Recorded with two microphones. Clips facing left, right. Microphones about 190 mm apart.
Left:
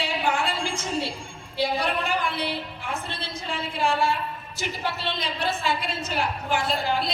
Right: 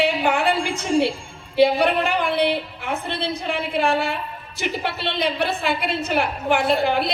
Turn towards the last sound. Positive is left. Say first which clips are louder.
# right 6 dB
turn(degrees=-60)  # may be behind; listen again after turning